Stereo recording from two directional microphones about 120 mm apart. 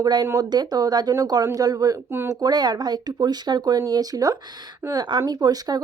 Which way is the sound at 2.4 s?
35° right (ahead or behind).